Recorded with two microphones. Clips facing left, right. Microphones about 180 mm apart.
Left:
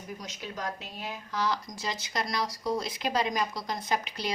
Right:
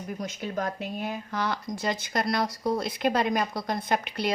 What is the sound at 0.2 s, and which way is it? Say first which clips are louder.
A woman's voice: right 10 dB; 55° right (ahead or behind).